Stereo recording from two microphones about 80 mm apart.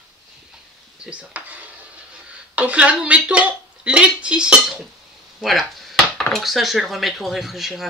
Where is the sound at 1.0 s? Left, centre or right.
Centre.